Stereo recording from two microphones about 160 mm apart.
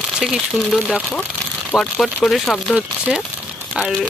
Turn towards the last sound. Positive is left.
turn(degrees=-5)  # may be behind; listen again after turning